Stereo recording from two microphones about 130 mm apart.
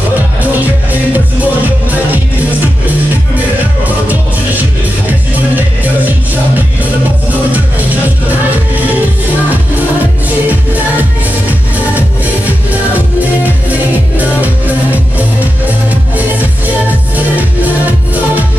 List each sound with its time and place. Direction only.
1.1 s music: 15° right (ahead or behind)
7.5 s music: 15° right (ahead or behind)
13.2 s music: 15° right (ahead or behind)